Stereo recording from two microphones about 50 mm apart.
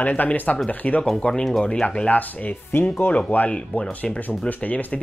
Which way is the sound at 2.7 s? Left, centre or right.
Left.